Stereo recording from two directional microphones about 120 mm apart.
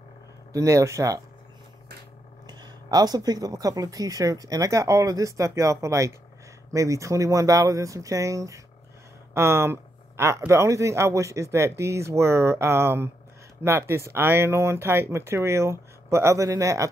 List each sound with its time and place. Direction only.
0.5 s a man's voice: 25° right (ahead or behind)
2.4 s a man's voice: 35° right (ahead or behind)